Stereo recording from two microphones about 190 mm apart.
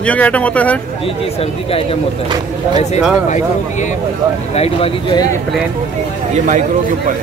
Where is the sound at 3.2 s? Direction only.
40° left (ahead or behind).